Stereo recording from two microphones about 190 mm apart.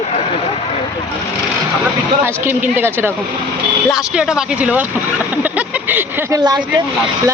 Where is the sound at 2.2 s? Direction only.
10° right (ahead or behind).